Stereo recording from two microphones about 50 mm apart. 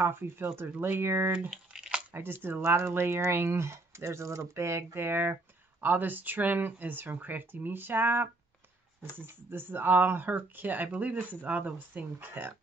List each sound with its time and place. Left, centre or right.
0.0 s speech: right
1.7 s a sound: centre
2.1 s speech: right
5.0 s speech: right